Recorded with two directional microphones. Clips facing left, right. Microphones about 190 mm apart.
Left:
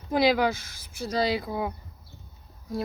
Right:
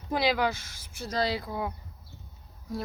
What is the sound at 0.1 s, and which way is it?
Speech, 10° left (ahead or behind).